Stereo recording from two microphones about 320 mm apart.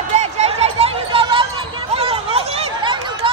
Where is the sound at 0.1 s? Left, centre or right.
Centre.